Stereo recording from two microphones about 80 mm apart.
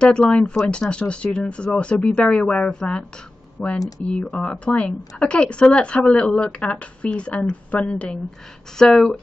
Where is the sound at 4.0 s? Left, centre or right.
Centre.